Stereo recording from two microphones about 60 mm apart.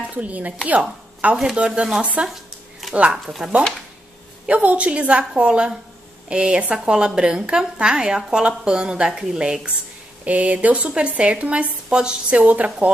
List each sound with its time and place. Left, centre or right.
0.0 s a woman's voice: right
1.3 s a woman's voice: centre
2.0 s a woman's voice: centre
4.5 s a woman's voice: right
12.4 s a woman's voice: right